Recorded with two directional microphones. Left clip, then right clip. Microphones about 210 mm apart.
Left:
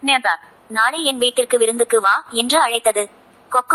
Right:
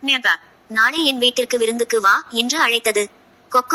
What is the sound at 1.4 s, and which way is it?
Speech, 5° right (ahead or behind).